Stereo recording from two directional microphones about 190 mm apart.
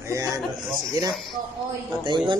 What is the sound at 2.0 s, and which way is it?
Speech, 25° right (ahead or behind).